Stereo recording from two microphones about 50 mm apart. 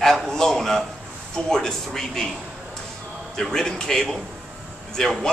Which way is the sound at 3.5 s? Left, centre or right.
Centre.